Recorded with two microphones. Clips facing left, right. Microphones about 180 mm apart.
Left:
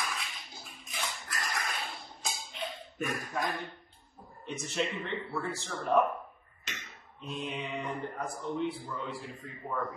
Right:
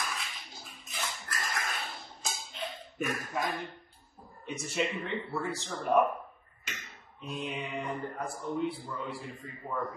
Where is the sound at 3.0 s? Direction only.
15° left (ahead or behind).